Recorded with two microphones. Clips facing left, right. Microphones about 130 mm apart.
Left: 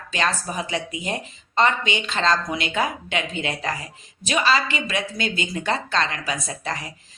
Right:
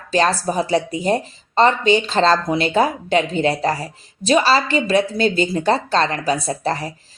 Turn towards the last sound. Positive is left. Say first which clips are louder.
# right 8 dB
turn(degrees=-35)  # may be behind; listen again after turning